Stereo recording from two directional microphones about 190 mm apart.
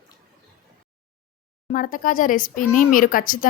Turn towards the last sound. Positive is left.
turn(degrees=45)  # may be behind; listen again after turning